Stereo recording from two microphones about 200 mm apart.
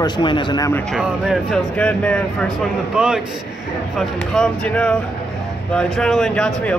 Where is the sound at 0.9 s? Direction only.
Centre (ahead or behind).